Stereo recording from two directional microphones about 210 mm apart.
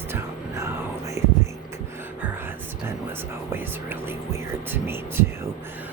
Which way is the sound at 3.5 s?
10° right (ahead or behind).